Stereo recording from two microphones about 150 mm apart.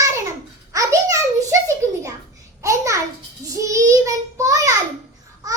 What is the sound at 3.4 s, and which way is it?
Child singing, 20° right (ahead or behind).